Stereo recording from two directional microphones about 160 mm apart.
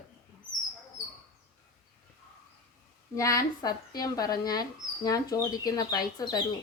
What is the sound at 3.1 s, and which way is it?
Speech, 20° left (ahead or behind).